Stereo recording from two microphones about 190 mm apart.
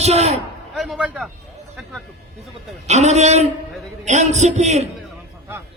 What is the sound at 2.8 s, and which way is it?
A man's voice, 35° right (ahead or behind).